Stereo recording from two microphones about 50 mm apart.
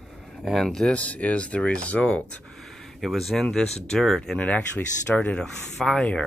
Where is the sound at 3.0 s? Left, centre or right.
Centre.